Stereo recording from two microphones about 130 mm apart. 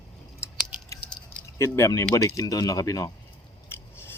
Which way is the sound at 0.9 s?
25° left (ahead or behind).